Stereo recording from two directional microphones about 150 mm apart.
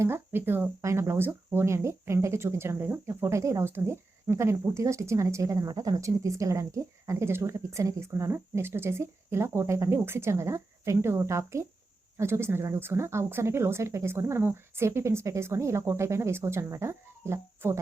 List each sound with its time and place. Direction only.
0.0 s speech: 15° right (ahead or behind)